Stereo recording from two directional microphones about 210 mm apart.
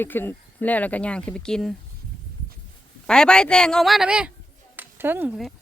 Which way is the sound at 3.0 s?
5° left (ahead or behind).